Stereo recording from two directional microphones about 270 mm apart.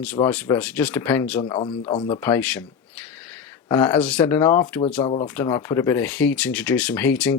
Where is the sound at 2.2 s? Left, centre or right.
Centre.